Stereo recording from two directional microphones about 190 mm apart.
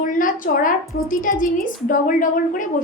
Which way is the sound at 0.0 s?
45° left (ahead or behind).